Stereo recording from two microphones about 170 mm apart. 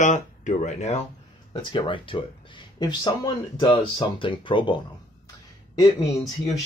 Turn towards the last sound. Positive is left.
turn(degrees=20)  # may be behind; listen again after turning